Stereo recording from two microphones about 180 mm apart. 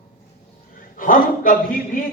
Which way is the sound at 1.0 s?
50° left (ahead or behind).